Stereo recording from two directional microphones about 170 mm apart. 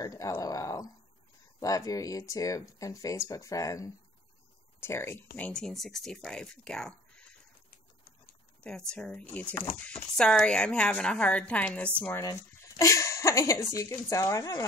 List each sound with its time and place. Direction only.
0.0 s speech: 20° left (ahead or behind)
8.6 s speech: 5° left (ahead or behind); by 14.7 s 20° left (ahead or behind)